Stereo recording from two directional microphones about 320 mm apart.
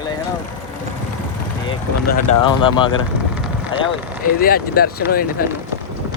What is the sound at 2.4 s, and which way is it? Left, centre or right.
Speech, centre.